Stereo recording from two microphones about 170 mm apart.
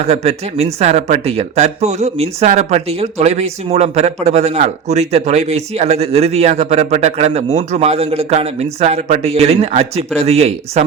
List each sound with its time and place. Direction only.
0.0 s speech: 40° right (ahead or behind)